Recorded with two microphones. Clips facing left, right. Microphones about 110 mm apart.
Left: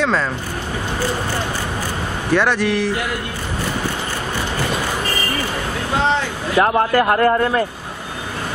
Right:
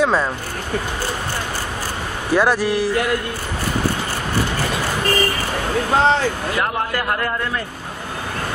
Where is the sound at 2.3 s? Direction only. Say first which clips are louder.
Even; 10° right (ahead or behind).